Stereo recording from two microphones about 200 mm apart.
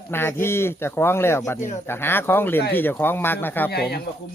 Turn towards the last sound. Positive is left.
turn(degrees=55)  # may be behind; listen again after turning